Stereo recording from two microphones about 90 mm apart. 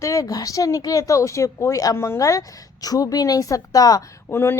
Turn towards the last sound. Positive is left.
turn(degrees=30)  # may be behind; listen again after turning